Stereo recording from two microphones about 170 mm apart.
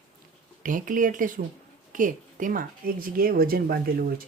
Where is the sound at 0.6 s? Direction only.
50° right (ahead or behind).